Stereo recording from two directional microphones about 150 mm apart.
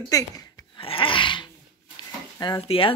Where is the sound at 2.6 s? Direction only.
35° left (ahead or behind).